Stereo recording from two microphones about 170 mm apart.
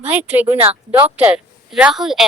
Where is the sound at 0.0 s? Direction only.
10° right (ahead or behind).